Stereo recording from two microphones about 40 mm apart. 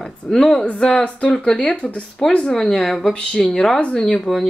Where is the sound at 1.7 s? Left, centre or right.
Left.